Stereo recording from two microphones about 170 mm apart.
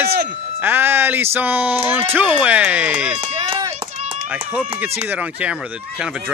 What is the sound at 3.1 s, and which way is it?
Run, 30° right (ahead or behind).